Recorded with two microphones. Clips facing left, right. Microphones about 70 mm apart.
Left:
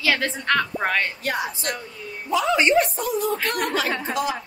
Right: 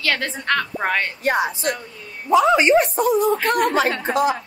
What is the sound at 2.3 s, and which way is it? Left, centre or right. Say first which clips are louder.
Speech: right 5 dB; right.